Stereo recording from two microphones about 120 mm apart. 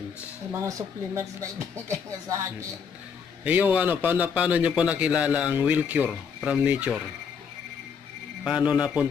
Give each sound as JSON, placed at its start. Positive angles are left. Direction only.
{"t": 0.5, "sound": "speech", "side_deg": -25}
{"t": 3.4, "sound": "a man's voice", "side_deg": -15}
{"t": 8.5, "sound": "a man's voice", "side_deg": -5}